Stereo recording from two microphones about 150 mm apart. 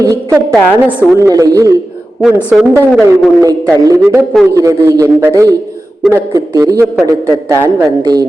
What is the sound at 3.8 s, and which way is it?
Speech, 20° right (ahead or behind).